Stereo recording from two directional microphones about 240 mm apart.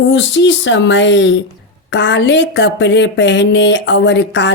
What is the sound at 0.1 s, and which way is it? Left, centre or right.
A woman's voice, left.